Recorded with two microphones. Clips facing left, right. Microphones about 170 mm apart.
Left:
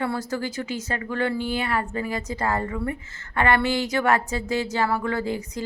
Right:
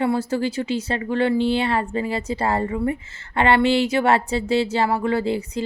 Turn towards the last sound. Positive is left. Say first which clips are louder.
# right 5 dB
turn(degrees=-25)  # may be behind; listen again after turning